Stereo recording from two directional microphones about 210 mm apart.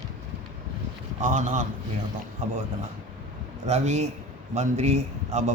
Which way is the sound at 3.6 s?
30° right (ahead or behind).